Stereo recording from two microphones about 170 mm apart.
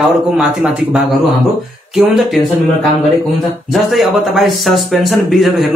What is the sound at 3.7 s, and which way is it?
Speech, centre (ahead or behind).